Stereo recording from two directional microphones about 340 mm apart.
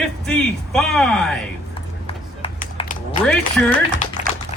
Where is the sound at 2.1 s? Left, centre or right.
Centre.